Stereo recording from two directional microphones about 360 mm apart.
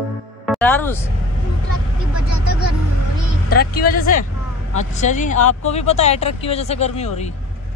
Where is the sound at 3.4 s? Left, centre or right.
Left.